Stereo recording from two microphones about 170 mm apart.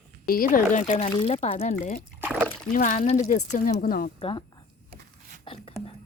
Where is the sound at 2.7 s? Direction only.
50° left (ahead or behind).